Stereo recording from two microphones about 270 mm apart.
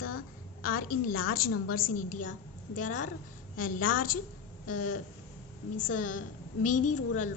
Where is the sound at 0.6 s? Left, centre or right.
Left.